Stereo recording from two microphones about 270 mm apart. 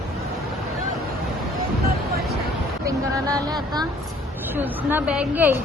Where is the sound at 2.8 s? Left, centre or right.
Centre.